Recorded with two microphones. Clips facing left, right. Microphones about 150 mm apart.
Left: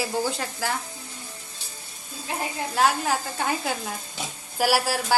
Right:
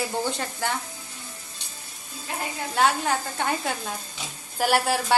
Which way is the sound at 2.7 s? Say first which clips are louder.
Even; centre (ahead or behind).